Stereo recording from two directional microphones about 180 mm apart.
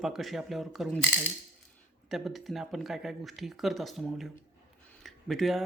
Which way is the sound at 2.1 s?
Centre (ahead or behind).